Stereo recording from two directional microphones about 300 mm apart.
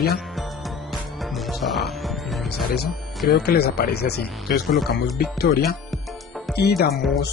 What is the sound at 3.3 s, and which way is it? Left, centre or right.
Speech, left.